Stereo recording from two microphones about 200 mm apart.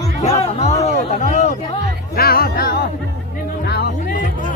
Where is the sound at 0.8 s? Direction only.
40° left (ahead or behind).